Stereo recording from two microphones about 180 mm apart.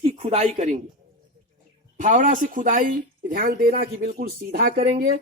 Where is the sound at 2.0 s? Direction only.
45° right (ahead or behind).